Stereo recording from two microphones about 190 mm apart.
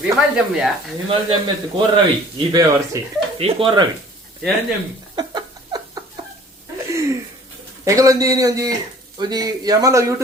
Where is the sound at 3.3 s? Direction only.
30° right (ahead or behind).